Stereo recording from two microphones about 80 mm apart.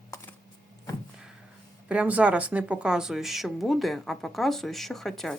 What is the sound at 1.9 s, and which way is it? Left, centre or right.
Speech, centre.